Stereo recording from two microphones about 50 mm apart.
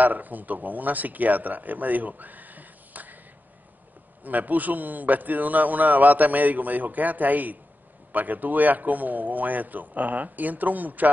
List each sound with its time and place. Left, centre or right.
0.0 s speech: right
4.2 s a man's voice: right